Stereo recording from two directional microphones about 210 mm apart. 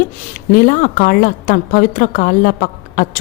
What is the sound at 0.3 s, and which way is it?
A woman's voice, 40° left (ahead or behind).